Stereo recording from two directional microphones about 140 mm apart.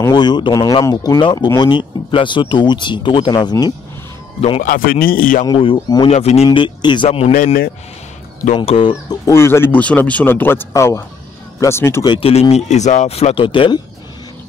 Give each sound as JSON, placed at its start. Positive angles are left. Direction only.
{"t": 0.1, "sound": "speech", "side_deg": 30}
{"t": 4.4, "sound": "speech", "side_deg": 50}
{"t": 4.6, "sound": "speech", "side_deg": 90}
{"t": 5.5, "sound": "speech", "side_deg": 35}
{"t": 6.0, "sound": "speech", "side_deg": 50}
{"t": 7.1, "sound": "speech", "side_deg": 50}
{"t": 8.5, "sound": "speech", "side_deg": 40}
{"t": 9.2, "sound": "speech", "side_deg": 20}
{"t": 12.1, "sound": "speech", "side_deg": 45}